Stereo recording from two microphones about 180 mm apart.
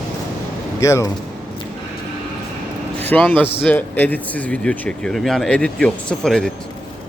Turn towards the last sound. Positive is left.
turn(degrees=5)  # may be behind; listen again after turning